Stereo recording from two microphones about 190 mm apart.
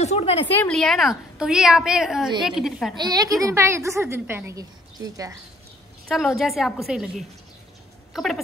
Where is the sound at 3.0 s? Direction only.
20° right (ahead or behind).